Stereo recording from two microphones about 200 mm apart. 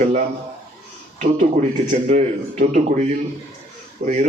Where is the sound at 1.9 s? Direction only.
40° right (ahead or behind).